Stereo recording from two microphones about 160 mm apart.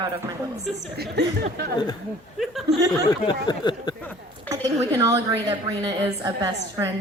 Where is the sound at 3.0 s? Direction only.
25° left (ahead or behind).